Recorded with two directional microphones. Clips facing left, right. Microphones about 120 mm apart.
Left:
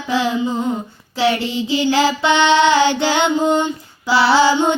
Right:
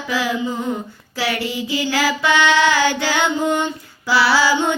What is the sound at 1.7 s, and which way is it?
Child singing, 25° left (ahead or behind).